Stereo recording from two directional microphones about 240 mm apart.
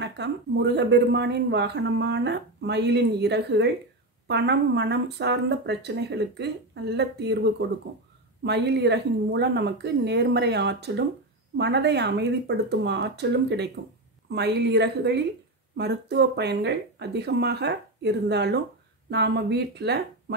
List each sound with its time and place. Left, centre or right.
0.0 s speech: right
8.5 s speech: right